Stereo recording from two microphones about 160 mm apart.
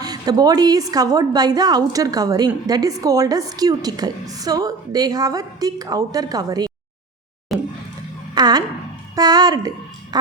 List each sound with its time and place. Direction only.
0.0 s a woman's voice: 25° right (ahead or behind)
7.5 s a sound: centre (ahead or behind)
8.4 s a woman's voice: 25° right (ahead or behind)